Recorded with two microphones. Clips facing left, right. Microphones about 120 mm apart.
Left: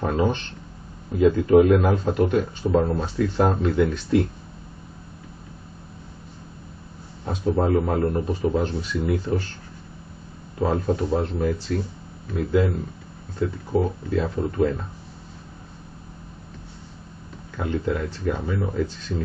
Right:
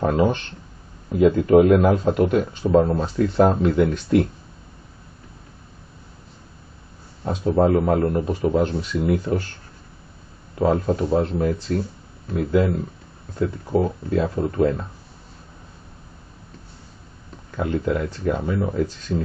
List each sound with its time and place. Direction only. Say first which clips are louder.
0.0 s a man's voice: right 3 dB; 40° right (ahead or behind)
3.7 s speech: right 2 dB; 45° right (ahead or behind)
7.2 s a man's voice: right 4 dB; 35° right (ahead or behind)
8.5 s speech: right 3 dB; 55° right (ahead or behind)
10.7 s a man's voice: right 3 dB; 35° right (ahead or behind)
14.2 s a man's voice: right 3 dB; 35° right (ahead or behind)
17.6 s speech: right 3 dB; 50° right (ahead or behind)